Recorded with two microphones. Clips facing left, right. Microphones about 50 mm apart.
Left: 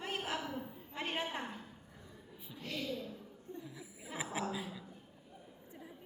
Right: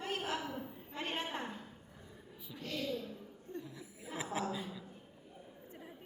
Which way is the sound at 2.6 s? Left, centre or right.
Centre.